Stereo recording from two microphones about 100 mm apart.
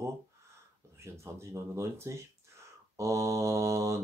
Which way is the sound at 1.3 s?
30° right (ahead or behind).